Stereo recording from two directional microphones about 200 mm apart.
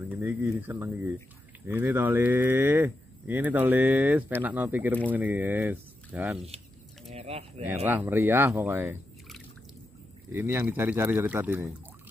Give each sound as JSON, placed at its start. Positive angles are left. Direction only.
{"t": 0.1, "sound": "speech", "side_deg": -10}
{"t": 7.1, "sound": "speech", "side_deg": -30}
{"t": 7.8, "sound": "speech", "side_deg": -10}
{"t": 10.3, "sound": "speech", "side_deg": -10}